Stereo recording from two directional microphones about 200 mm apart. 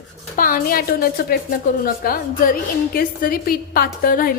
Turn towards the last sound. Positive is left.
turn(degrees=45)  # may be behind; listen again after turning